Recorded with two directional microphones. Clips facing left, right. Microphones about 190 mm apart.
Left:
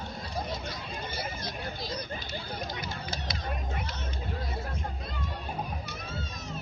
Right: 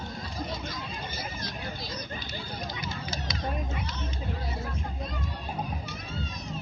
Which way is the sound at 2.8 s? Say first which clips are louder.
Right 1 dB; 55° left (ahead or behind).